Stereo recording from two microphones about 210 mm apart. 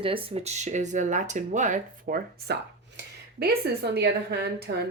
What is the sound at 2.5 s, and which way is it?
Speech, 50° right (ahead or behind).